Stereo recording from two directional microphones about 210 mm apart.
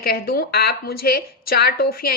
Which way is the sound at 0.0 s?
45° left (ahead or behind).